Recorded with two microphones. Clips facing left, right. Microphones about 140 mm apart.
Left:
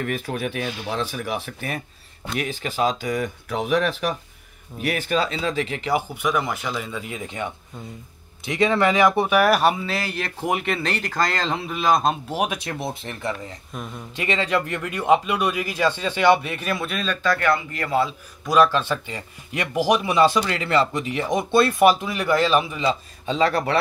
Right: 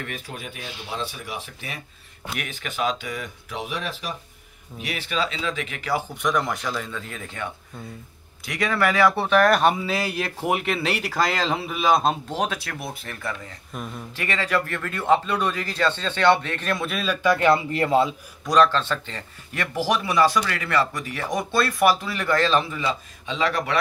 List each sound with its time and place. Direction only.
0.0 s speech: 55° left (ahead or behind)
2.3 s speech: 30° left (ahead or behind)
3.4 s speech: 60° left (ahead or behind)
4.7 s speech: 50° left (ahead or behind); by 6.0 s 25° left (ahead or behind)
6.2 s speech: 5° left (ahead or behind)
8.5 s speech: 25° left (ahead or behind); by 12.2 s centre (ahead or behind)
12.3 s speech: 15° left (ahead or behind)
13.7 s speech: centre (ahead or behind)
14.1 s speech: 20° left (ahead or behind); by 18.1 s 25° right (ahead or behind)
18.4 s speech: 5° left (ahead or behind)
23.2 s speech: 40° left (ahead or behind)